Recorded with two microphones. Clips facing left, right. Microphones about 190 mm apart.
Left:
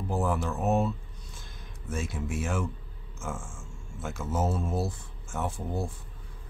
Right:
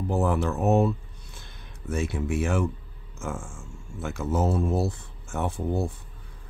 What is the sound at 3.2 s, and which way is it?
Speech, 65° right (ahead or behind).